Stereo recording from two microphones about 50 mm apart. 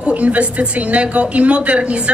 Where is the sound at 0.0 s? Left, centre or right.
Right.